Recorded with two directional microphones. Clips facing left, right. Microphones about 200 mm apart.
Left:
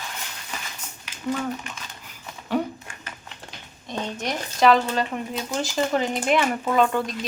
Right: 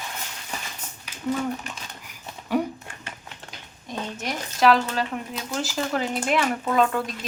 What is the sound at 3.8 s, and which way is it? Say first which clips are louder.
Speech: left 2 dB; 5° right (ahead or behind).